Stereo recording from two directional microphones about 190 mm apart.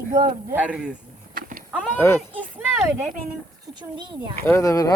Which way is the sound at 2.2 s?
10° right (ahead or behind).